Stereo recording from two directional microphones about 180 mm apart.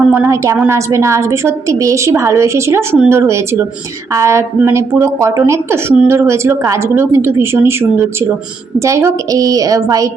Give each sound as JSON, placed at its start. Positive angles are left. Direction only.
{"t": 0.1, "sound": "a woman's voice", "side_deg": -15}